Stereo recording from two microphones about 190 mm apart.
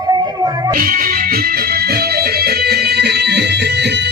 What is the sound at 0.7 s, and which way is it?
Music, 45° right (ahead or behind).